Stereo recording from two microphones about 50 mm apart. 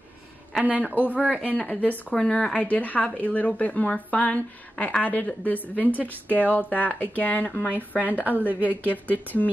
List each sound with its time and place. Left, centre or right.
0.7 s a woman's voice: right
0.9 s speech: left
1.3 s speech: right
1.7 s speech: left
2.1 s speech: centre; by 7.7 s left
8.2 s a woman's voice: right
9.0 s speech: left